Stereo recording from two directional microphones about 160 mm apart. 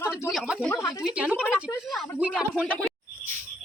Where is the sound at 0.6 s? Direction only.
10° left (ahead or behind).